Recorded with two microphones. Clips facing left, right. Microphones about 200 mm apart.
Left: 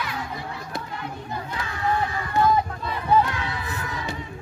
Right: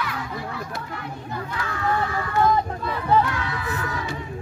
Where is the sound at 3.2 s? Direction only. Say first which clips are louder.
Right 1 dB; 25° left (ahead or behind).